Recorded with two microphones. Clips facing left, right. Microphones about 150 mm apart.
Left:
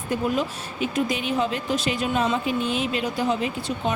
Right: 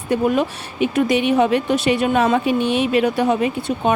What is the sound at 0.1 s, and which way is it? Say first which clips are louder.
Speech: right 7 dB; 65° right (ahead or behind).